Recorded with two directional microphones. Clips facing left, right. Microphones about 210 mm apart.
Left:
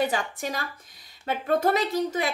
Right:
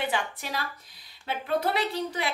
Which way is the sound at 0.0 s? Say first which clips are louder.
Left 4 dB; 45° left (ahead or behind).